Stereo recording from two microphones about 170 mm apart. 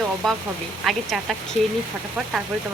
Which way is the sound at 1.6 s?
45° right (ahead or behind).